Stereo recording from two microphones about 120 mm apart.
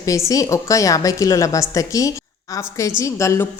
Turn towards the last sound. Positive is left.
turn(degrees=25)  # may be behind; listen again after turning